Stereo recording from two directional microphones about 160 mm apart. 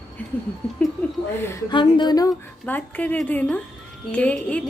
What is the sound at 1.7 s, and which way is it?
Speech, 30° left (ahead or behind).